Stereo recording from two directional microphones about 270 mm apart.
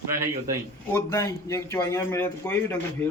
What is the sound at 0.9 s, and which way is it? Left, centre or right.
A man's voice, centre.